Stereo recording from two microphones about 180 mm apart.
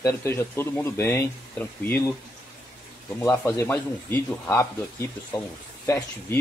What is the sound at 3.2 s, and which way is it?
Speech, 15° left (ahead or behind).